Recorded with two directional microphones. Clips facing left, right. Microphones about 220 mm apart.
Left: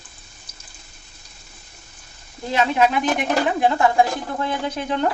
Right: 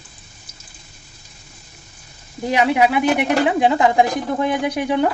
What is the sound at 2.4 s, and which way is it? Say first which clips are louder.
Speech: right 2 dB; 15° right (ahead or behind).